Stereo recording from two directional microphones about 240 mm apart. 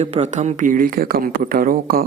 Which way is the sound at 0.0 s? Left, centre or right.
Right.